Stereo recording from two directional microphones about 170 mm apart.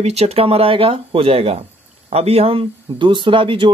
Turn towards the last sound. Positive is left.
turn(degrees=-30)  # may be behind; listen again after turning